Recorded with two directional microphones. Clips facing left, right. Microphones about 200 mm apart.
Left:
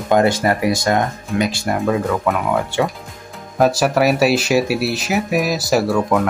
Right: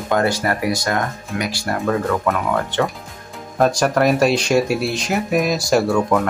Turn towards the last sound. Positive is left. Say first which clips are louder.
# even
turn(degrees=5)  # may be behind; listen again after turning